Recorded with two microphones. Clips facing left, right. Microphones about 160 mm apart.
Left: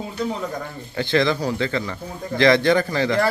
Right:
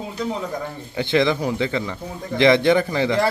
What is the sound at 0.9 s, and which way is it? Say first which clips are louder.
Speech: right 1 dB; 20° right (ahead or behind).